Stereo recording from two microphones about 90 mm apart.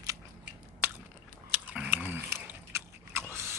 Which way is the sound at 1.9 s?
25° right (ahead or behind).